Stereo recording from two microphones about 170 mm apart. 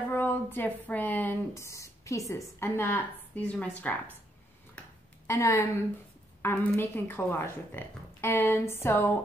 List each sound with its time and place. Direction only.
0.1 s speech: 10° left (ahead or behind)
5.2 s a woman's voice: 15° left (ahead or behind)